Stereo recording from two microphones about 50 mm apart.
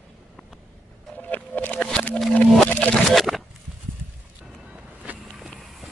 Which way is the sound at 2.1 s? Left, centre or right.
Left.